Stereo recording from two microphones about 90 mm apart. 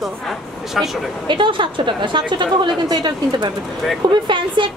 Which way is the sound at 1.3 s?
65° right (ahead or behind).